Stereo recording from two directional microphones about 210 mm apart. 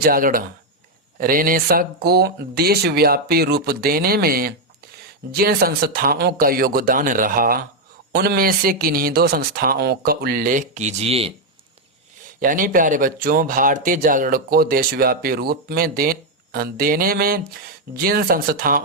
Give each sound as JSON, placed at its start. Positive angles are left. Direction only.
{"t": 0.0, "sound": "speech", "side_deg": -45}
{"t": 12.4, "sound": "speech", "side_deg": -40}